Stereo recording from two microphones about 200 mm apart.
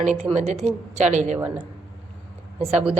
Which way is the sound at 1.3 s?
10° right (ahead or behind).